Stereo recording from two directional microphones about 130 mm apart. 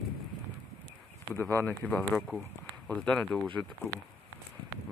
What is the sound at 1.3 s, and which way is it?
Speech, 15° left (ahead or behind).